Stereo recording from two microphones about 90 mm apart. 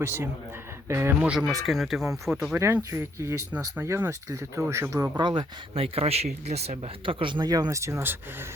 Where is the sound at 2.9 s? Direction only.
30° right (ahead or behind).